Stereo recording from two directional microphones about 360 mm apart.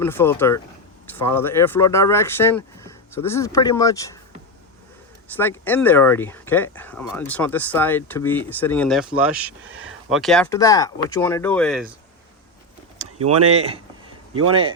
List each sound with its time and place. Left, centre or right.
0.0 s speech: centre
5.4 s speech: centre
9.7 s a sound: right
10.1 s speech: centre
13.0 s speech: centre